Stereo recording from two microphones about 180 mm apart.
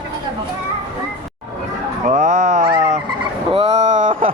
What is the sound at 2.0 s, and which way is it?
Speech, 40° right (ahead or behind).